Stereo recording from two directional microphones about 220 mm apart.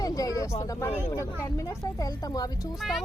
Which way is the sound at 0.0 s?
15° left (ahead or behind).